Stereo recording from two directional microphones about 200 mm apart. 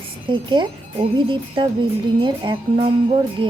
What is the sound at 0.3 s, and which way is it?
A woman's voice, 25° right (ahead or behind).